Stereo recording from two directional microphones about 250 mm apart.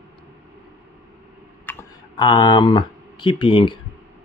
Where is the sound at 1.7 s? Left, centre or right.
Centre.